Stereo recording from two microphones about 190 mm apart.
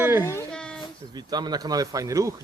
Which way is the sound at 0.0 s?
10° right (ahead or behind).